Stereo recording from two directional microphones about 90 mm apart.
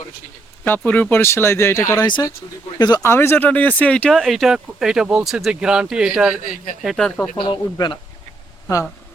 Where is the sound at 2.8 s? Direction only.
50° left (ahead or behind).